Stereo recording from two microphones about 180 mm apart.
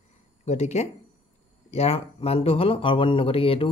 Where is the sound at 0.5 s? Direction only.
40° left (ahead or behind).